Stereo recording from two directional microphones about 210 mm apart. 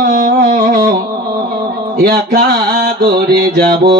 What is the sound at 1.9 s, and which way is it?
Music, 50° right (ahead or behind).